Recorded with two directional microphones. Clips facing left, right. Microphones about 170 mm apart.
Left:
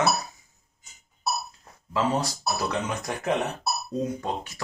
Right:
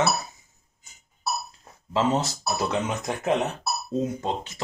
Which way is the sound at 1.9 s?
25° right (ahead or behind).